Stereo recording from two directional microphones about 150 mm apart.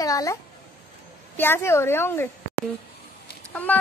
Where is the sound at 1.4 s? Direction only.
15° left (ahead or behind).